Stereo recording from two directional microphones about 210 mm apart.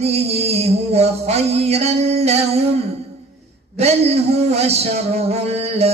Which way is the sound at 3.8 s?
30° right (ahead or behind).